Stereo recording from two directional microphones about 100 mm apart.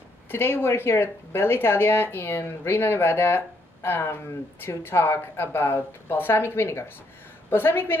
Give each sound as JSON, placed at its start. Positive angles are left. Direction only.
{"t": 0.3, "sound": "speech", "side_deg": 20}